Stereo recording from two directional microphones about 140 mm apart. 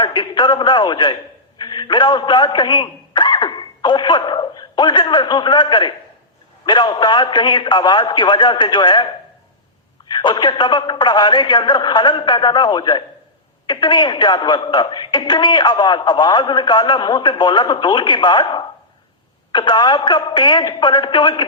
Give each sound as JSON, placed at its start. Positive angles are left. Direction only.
{"t": 0.0, "sound": "a woman's voice", "side_deg": 35}
{"t": 10.1, "sound": "a woman's voice", "side_deg": 35}